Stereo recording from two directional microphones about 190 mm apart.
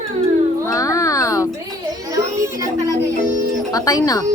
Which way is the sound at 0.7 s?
15° left (ahead or behind).